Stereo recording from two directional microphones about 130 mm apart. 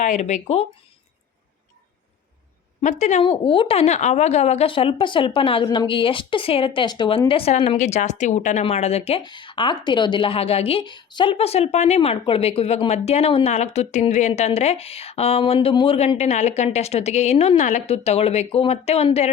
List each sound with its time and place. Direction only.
0.0 s speech: 65° left (ahead or behind)
2.8 s speech: 65° left (ahead or behind)
3.2 s a woman's voice: 40° left (ahead or behind)
7.8 s speech: 65° left (ahead or behind)
8.6 s a woman's voice: 55° left (ahead or behind)
9.2 s a woman's voice: 35° left (ahead or behind); by 19.3 s 50° left (ahead or behind)